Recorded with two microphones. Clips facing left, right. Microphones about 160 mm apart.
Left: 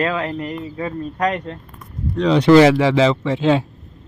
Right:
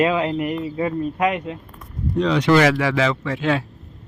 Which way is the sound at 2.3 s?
30° left (ahead or behind).